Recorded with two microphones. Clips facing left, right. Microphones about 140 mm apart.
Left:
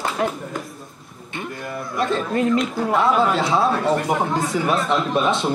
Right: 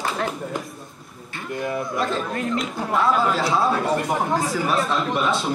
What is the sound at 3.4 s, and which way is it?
A man's voice, centre (ahead or behind).